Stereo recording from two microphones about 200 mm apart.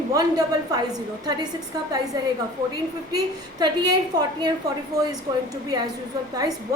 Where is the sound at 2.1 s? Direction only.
20° right (ahead or behind).